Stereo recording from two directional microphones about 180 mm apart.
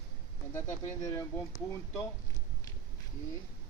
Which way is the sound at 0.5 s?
15° left (ahead or behind).